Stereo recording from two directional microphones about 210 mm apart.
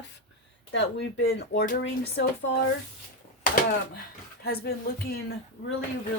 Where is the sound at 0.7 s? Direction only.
55° left (ahead or behind).